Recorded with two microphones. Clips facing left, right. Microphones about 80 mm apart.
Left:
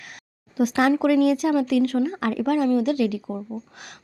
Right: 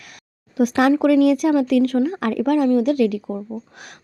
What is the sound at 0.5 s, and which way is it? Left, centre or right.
A woman's voice, right.